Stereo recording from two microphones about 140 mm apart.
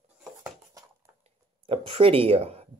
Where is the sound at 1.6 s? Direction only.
40° right (ahead or behind).